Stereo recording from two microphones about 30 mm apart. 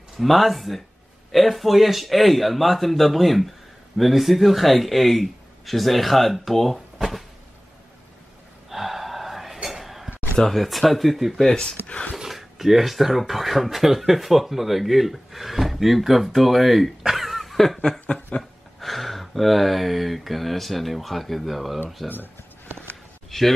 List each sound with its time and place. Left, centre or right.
0.2 s speech: centre
7.0 s a sound: centre
8.6 s gasp: centre
9.6 s whispering: centre
10.5 s speech: centre
11.3 s speech: centre
11.9 s a sound: left
12.3 s speech: centre
18.3 s a sound: left
18.8 s speech: centre
22.0 s speech: centre
23.3 s speech: centre